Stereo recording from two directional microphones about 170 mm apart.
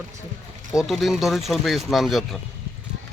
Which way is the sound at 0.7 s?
Centre (ahead or behind).